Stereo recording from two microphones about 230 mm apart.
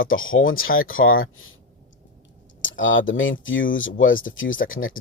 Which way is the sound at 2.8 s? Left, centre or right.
Left.